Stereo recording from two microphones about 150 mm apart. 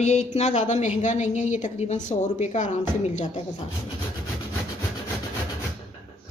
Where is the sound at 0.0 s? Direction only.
50° left (ahead or behind).